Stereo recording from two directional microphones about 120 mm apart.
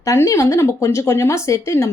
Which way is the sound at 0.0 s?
25° left (ahead or behind).